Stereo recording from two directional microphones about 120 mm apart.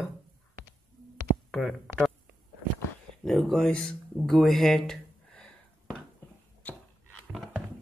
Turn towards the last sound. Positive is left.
turn(degrees=0)  # may be behind; listen again after turning